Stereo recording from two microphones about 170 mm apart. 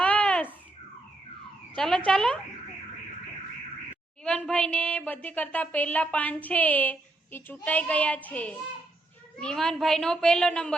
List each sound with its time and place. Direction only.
0.0 s babbling: 5° left (ahead or behind)
1.7 s a woman's voice: 5° left (ahead or behind)
4.2 s a woman's voice: 5° left (ahead or behind)